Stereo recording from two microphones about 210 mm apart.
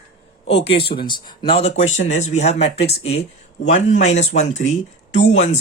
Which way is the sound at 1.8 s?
65° left (ahead or behind).